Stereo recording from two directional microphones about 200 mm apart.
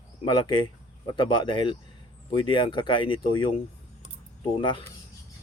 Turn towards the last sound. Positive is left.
turn(degrees=25)  # may be behind; listen again after turning